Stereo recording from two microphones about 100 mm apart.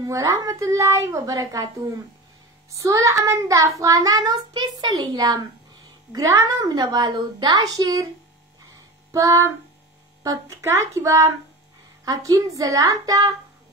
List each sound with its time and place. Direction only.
0.0 s child singing: 35° right (ahead or behind)